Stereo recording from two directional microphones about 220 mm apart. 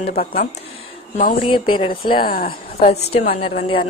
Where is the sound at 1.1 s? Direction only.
30° left (ahead or behind).